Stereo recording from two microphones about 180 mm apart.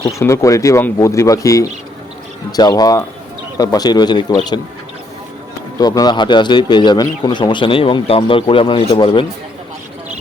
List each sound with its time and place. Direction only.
0.0 s a man's voice: 15° left (ahead or behind)
5.8 s a man's voice: 20° left (ahead or behind)